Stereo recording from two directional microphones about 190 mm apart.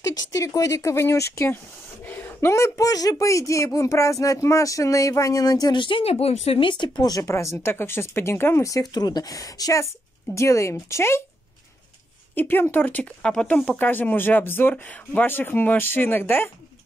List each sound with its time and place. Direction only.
0.3 s speech: 15° left (ahead or behind)
12.4 s speech: 10° left (ahead or behind)